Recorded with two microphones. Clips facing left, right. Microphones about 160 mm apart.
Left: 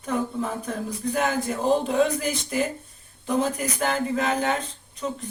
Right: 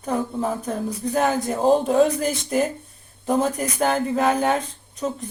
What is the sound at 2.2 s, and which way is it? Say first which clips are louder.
Speech: right 4 dB; 45° right (ahead or behind).